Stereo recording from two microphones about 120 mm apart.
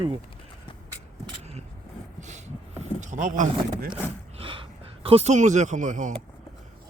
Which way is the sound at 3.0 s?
90° right.